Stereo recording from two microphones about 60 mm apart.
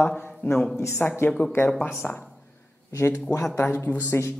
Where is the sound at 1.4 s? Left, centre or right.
Left.